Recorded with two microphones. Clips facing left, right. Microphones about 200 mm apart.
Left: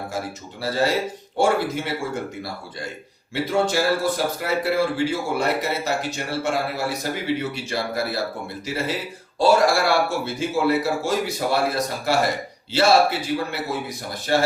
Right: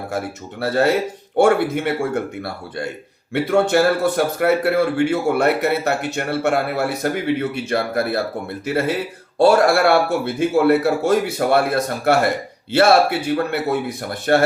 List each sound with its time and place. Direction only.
0.6 s speech: 60° right (ahead or behind)